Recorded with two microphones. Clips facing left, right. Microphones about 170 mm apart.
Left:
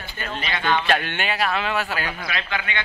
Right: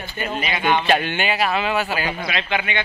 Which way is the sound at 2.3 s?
20° right (ahead or behind).